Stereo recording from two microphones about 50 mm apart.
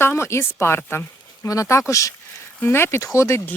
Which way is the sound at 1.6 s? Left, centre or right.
Left.